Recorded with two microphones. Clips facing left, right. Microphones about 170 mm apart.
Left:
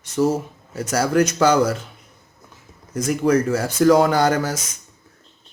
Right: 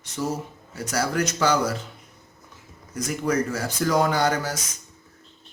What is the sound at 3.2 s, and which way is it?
Speech, 80° left.